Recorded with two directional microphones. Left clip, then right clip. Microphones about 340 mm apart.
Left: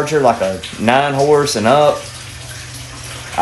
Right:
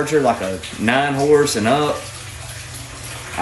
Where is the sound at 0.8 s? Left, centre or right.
Centre.